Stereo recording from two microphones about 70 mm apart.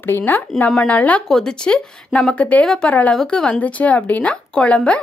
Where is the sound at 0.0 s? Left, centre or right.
Left.